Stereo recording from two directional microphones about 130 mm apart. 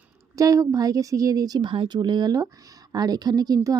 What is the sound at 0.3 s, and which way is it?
A woman's voice, 25° right (ahead or behind).